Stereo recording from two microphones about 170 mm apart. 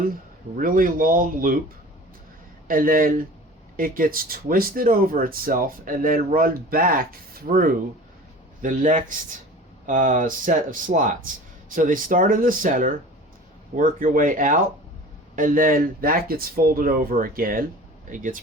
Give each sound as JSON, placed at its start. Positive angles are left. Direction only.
{"t": 0.1, "sound": "speech", "side_deg": -55}
{"t": 2.6, "sound": "speech", "side_deg": -55}